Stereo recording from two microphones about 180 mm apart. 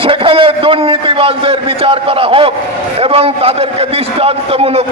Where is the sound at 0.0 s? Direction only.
30° right (ahead or behind).